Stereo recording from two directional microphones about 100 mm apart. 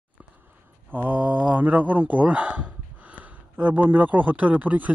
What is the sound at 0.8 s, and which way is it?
Mantra, 20° right (ahead or behind).